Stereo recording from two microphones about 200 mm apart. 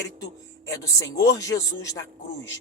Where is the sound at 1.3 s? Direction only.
15° left (ahead or behind).